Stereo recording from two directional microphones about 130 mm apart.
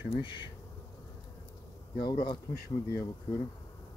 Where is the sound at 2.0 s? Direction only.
35° left (ahead or behind).